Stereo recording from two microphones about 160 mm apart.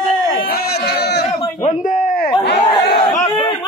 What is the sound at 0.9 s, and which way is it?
Crowd, 90° left.